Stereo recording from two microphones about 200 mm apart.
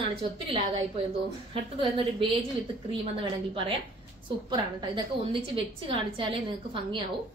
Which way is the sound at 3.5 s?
25° right (ahead or behind).